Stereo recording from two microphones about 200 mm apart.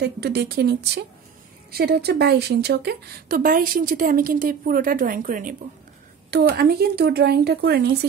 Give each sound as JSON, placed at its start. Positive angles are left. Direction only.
{"t": 0.0, "sound": "speech", "side_deg": -55}
{"t": 6.3, "sound": "speech", "side_deg": -50}